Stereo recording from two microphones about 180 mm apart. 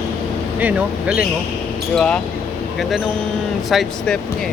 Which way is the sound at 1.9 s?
5° left (ahead or behind).